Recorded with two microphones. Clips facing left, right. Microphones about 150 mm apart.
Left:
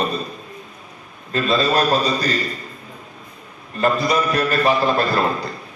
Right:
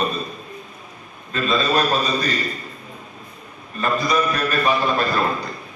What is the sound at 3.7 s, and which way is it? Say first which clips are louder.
A man's voice: left 2 dB; 30° left (ahead or behind).